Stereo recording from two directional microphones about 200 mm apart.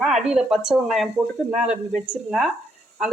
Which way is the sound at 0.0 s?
Centre (ahead or behind).